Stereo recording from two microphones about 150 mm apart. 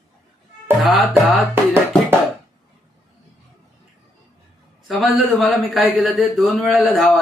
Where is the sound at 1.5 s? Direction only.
15° right (ahead or behind).